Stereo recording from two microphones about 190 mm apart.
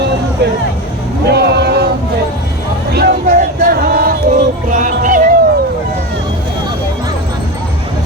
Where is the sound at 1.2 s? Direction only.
60° right (ahead or behind).